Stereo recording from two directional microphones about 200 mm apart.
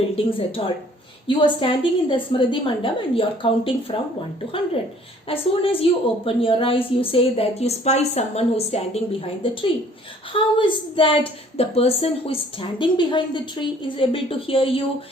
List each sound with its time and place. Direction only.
0.2 s a woman's voice: 30° left (ahead or behind)
5.3 s a woman's voice: 30° left (ahead or behind)